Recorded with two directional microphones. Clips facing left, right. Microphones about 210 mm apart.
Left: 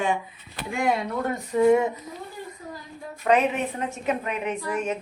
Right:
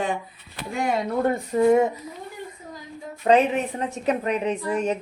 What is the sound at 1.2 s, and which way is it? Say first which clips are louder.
Speech: even; 40° right (ahead or behind).